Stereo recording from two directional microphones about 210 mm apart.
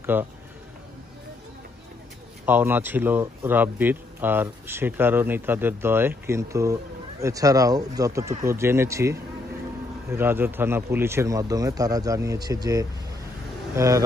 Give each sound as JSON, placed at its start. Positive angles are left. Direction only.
{"t": 0.0, "sound": "a man's voice", "side_deg": -10}
{"t": 2.4, "sound": "speech", "side_deg": -10}